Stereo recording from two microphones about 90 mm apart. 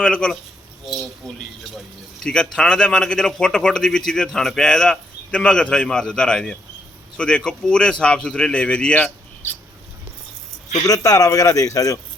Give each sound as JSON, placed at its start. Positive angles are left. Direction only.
{"t": 0.0, "sound": "speech", "side_deg": 10}
{"t": 2.2, "sound": "speech", "side_deg": 10}
{"t": 10.8, "sound": "speech", "side_deg": 45}